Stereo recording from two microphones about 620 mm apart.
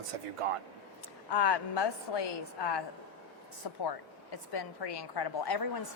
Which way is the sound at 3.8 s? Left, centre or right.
Left.